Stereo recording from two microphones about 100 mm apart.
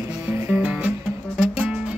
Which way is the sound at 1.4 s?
10° right (ahead or behind).